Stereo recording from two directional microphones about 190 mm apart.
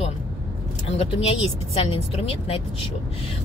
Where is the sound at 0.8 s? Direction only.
35° left (ahead or behind).